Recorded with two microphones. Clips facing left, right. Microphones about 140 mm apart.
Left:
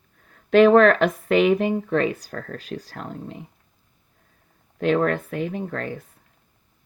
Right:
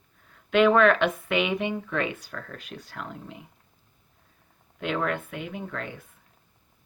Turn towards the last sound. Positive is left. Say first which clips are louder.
# left 6 dB
turn(degrees=40)  # may be behind; listen again after turning